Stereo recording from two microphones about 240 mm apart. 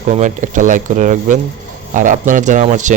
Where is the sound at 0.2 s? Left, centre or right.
Right.